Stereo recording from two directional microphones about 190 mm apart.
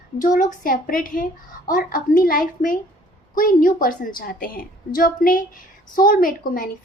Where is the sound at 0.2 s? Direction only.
45° left (ahead or behind).